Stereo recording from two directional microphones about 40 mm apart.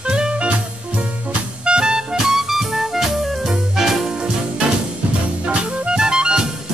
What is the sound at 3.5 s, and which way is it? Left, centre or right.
Music, centre.